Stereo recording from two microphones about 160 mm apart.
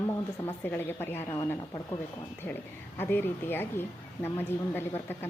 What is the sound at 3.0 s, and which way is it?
A woman's voice, 10° left (ahead or behind).